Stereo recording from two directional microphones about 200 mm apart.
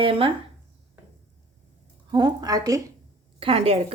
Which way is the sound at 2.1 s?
20° right (ahead or behind).